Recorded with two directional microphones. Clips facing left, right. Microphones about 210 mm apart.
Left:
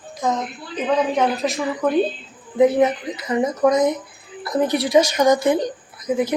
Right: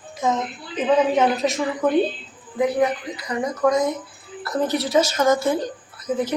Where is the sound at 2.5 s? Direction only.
20° left (ahead or behind).